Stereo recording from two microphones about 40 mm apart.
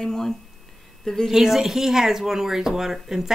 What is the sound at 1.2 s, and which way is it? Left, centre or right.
Speech, centre.